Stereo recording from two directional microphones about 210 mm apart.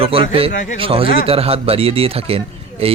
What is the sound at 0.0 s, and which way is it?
Speech, 25° right (ahead or behind).